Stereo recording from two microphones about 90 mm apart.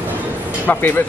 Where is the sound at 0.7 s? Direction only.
20° left (ahead or behind).